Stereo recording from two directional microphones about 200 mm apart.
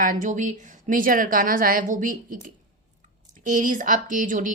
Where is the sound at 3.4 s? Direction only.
40° right (ahead or behind).